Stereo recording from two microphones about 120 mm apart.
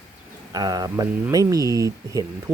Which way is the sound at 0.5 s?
30° right (ahead or behind).